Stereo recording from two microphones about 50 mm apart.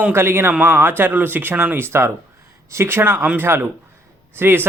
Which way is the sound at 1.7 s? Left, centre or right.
Right.